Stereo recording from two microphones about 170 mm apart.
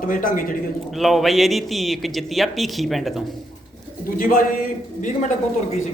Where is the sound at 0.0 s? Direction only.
55° left (ahead or behind).